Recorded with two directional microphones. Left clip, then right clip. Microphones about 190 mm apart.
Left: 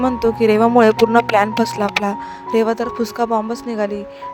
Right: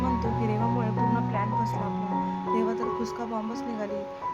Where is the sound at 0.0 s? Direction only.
50° left (ahead or behind).